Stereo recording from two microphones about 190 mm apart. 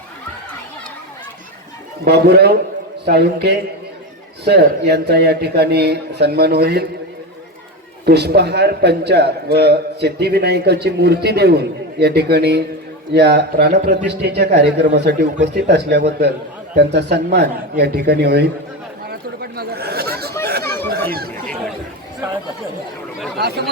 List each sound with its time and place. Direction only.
2.0 s a man's voice: 60° right (ahead or behind)
8.0 s a man's voice: 60° right (ahead or behind)
19.0 s chatter: 55° right (ahead or behind)
23.4 s a man's voice: 55° right (ahead or behind)